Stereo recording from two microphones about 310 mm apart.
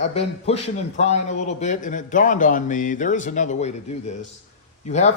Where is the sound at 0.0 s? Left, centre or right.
Centre.